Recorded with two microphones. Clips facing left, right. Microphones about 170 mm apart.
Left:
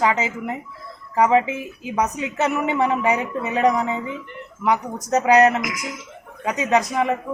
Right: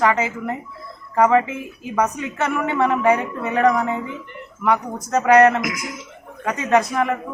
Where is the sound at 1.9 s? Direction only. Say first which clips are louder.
Right 1 dB; 20° left (ahead or behind).